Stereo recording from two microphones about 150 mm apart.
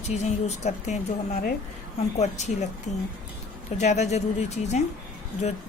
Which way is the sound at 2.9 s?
50° left (ahead or behind).